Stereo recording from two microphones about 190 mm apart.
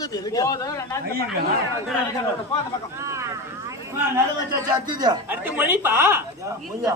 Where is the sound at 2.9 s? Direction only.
15° right (ahead or behind).